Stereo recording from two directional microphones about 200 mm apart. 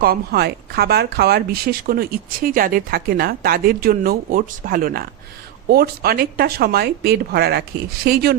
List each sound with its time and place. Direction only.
0.0 s speech: 50° right (ahead or behind)